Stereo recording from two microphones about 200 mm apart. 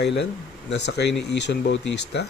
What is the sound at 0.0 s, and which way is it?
Speech, 60° left (ahead or behind).